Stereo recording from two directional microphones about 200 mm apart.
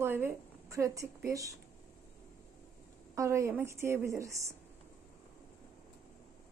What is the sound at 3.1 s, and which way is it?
Speech, 15° right (ahead or behind).